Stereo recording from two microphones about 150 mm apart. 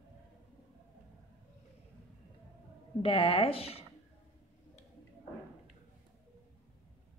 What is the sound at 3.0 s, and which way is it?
Speech, 35° left (ahead or behind).